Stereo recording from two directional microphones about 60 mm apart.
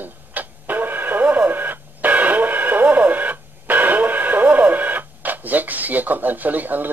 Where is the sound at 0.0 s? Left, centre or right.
Right.